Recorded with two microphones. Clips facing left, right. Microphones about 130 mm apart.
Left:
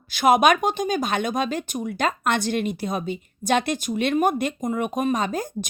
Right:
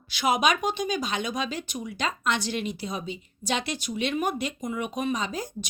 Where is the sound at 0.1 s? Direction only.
50° left (ahead or behind).